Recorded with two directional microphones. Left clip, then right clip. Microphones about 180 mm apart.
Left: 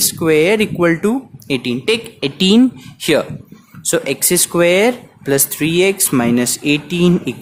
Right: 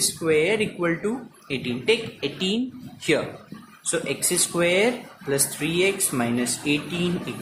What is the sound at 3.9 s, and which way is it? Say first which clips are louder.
Speech: left 9 dB; 60° left (ahead or behind).